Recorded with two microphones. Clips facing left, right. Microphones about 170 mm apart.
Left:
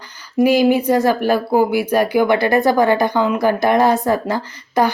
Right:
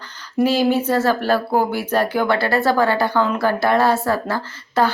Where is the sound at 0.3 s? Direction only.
15° left (ahead or behind).